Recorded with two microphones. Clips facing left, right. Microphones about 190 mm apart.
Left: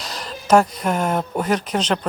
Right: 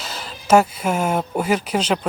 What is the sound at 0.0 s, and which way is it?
Speech, centre (ahead or behind).